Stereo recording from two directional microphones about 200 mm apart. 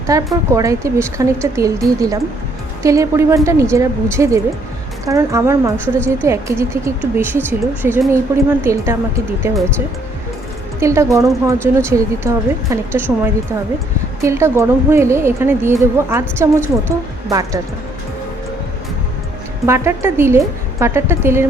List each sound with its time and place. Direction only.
0.1 s a woman's voice: 15° right (ahead or behind)
5.7 s a woman's voice: 5° left (ahead or behind)
6.2 s a woman's voice: 15° right (ahead or behind)
10.8 s a woman's voice: 15° right (ahead or behind)
19.6 s a woman's voice: 15° right (ahead or behind)